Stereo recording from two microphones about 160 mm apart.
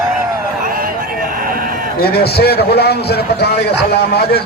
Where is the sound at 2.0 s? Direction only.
75° left (ahead or behind).